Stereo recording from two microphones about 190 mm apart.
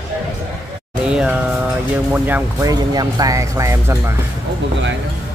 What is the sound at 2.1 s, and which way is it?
Speech, 10° right (ahead or behind).